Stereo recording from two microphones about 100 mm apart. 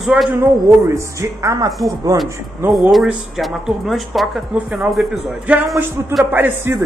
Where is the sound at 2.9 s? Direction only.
Centre (ahead or behind).